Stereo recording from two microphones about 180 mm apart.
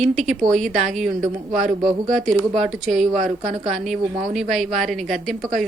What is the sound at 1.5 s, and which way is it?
Speech, 45° right (ahead or behind).